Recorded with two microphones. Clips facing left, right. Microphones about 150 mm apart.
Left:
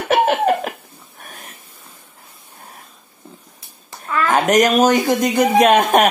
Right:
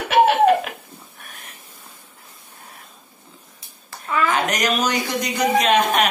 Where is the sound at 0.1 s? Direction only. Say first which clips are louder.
Right 1 dB; 45° left (ahead or behind).